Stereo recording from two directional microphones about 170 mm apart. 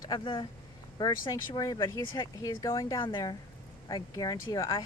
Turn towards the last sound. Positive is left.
turn(degrees=20)  # may be behind; listen again after turning